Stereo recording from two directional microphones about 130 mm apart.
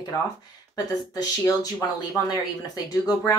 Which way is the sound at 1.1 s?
25° left (ahead or behind).